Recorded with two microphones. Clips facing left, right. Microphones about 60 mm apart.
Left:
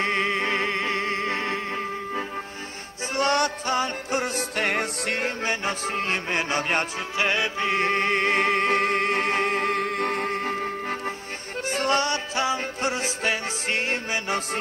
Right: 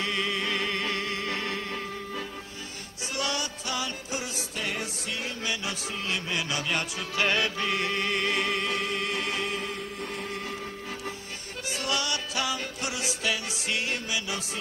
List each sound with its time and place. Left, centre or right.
0.0 s music: left
3.2 s music: left
3.6 s music: left
7.2 s music: left